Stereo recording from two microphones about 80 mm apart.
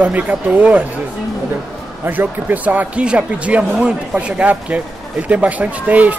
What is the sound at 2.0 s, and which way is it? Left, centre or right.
Speech, right.